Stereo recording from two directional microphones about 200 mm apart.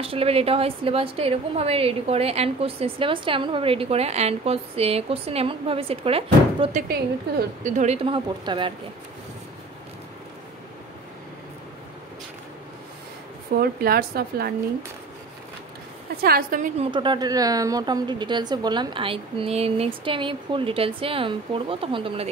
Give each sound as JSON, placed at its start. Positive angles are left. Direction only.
{"t": 0.0, "sound": "a woman's voice", "side_deg": -30}
{"t": 6.9, "sound": "a woman's voice", "side_deg": -45}
{"t": 13.6, "sound": "a woman's voice", "side_deg": -50}
{"t": 16.2, "sound": "a woman's voice", "side_deg": -50}
{"t": 16.8, "sound": "a woman's voice", "side_deg": -25}